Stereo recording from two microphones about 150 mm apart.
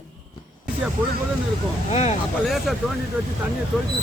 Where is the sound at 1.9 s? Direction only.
50° left (ahead or behind).